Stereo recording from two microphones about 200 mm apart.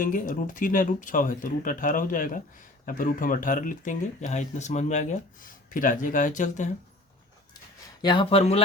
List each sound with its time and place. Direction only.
0.0 s speech: 40° left (ahead or behind)
8.0 s speech: 25° left (ahead or behind)